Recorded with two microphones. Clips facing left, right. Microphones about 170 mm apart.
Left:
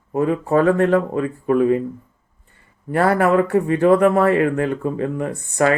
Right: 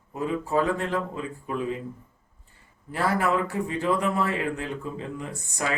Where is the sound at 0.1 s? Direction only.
60° left (ahead or behind).